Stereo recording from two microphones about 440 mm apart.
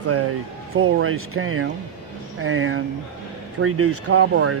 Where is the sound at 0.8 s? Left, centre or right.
Right.